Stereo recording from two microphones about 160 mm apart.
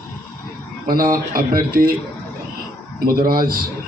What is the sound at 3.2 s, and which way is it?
Speech, 65° right (ahead or behind).